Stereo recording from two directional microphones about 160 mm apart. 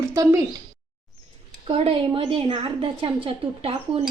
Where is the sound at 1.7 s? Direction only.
35° right (ahead or behind).